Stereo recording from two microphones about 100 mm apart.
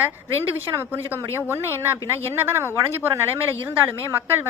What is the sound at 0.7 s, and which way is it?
A woman's voice, 20° right (ahead or behind).